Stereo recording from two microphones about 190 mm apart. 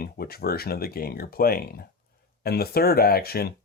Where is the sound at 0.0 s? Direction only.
55° left (ahead or behind).